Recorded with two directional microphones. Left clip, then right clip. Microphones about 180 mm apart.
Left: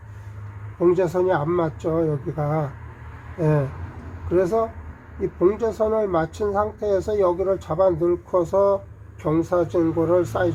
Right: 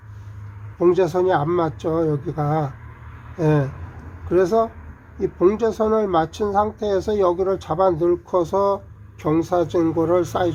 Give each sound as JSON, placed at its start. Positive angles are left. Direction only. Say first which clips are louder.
{"t": 0.8, "sound": "a man's voice", "louder": "right 2 dB", "side_deg": -35}